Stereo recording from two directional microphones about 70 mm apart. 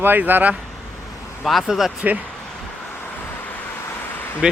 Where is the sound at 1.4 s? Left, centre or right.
Centre.